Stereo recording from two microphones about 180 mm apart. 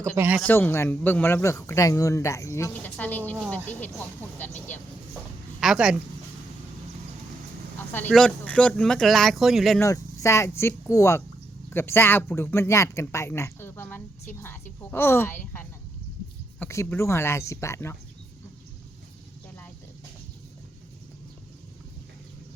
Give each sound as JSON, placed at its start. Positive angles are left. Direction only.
{"t": 0.2, "sound": "speech", "side_deg": -10}
{"t": 0.4, "sound": "speech", "side_deg": 10}
{"t": 5.5, "sound": "speech", "side_deg": -5}
{"t": 7.9, "sound": "speech", "side_deg": 5}
{"t": 9.8, "sound": "speech", "side_deg": 15}